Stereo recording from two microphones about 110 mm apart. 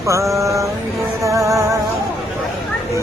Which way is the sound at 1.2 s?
30° right (ahead or behind).